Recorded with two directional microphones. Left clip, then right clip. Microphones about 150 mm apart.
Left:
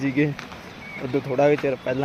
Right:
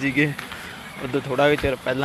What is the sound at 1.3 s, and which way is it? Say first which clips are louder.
Speech: even; 5° left (ahead or behind).